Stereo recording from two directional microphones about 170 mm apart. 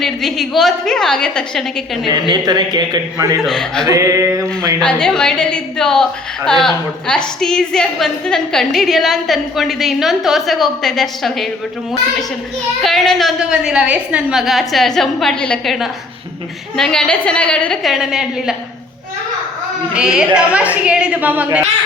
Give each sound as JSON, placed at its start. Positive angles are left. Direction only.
{"t": 0.0, "sound": "a woman's voice", "side_deg": 0}
{"t": 2.0, "sound": "a man's voice", "side_deg": -25}
{"t": 3.4, "sound": "a woman's voice", "side_deg": 5}
{"t": 3.8, "sound": "a man's voice", "side_deg": -20}
{"t": 4.8, "sound": "a woman's voice", "side_deg": 5}
{"t": 12.8, "sound": "a woman's voice", "side_deg": 0}
{"t": 20.0, "sound": "a woman's voice", "side_deg": -5}